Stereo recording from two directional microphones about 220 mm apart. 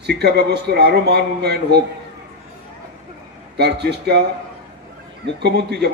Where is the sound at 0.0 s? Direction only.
50° right (ahead or behind).